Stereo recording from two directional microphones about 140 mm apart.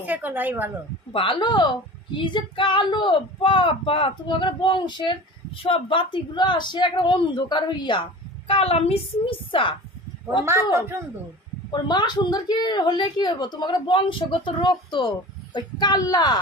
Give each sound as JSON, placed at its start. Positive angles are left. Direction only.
{"t": 0.0, "sound": "a woman's voice", "side_deg": -10}
{"t": 1.1, "sound": "a woman's voice", "side_deg": 35}
{"t": 10.4, "sound": "a woman's voice", "side_deg": -20}
{"t": 11.7, "sound": "a woman's voice", "side_deg": 30}